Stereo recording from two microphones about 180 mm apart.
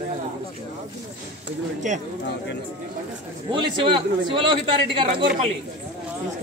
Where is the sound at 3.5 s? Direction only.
25° right (ahead or behind).